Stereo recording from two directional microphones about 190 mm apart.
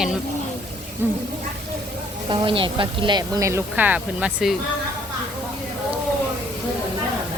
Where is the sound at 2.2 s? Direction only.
25° right (ahead or behind); by 4.5 s 5° right (ahead or behind).